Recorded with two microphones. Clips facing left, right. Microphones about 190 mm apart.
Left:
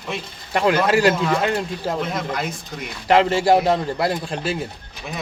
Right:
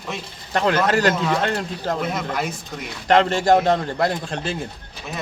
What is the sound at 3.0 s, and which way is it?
Speech, 10° left (ahead or behind).